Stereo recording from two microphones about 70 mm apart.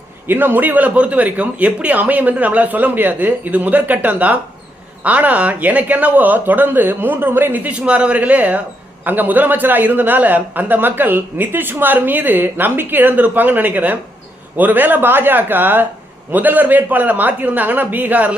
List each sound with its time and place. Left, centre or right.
0.3 s a man's voice: right
7.7 s a man's voice: centre